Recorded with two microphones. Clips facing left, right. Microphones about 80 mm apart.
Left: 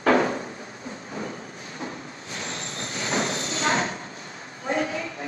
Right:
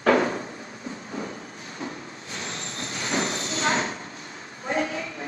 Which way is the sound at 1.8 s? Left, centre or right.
Left.